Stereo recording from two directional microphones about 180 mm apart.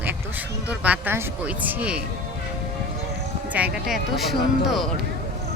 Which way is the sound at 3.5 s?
5° right (ahead or behind).